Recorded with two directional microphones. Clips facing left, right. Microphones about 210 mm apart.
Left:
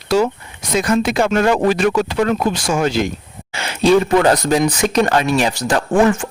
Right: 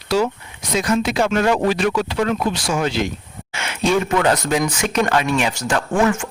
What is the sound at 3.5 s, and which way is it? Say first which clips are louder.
Speech: left 6 dB; 35° left (ahead or behind).